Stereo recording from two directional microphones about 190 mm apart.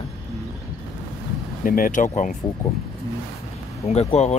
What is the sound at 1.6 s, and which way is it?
Speech, 45° left (ahead or behind).